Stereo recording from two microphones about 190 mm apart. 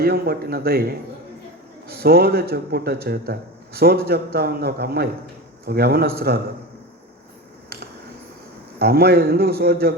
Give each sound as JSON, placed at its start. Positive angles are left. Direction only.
{"t": 0.0, "sound": "speech", "side_deg": -55}
{"t": 8.8, "sound": "speech", "side_deg": -55}